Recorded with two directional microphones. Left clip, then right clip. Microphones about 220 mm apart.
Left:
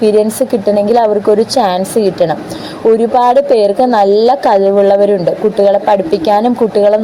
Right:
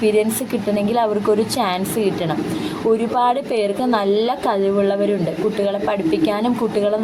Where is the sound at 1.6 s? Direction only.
25° left (ahead or behind).